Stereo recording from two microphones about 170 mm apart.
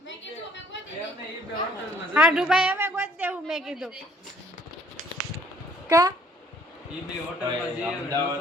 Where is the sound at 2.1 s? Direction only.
5° right (ahead or behind).